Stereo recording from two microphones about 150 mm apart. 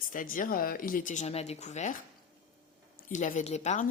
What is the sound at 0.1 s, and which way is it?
Speech, 65° left (ahead or behind).